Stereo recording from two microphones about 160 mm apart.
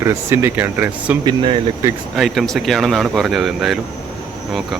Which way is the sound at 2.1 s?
Centre (ahead or behind).